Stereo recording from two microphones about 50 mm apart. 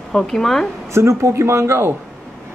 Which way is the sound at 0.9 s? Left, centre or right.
Right.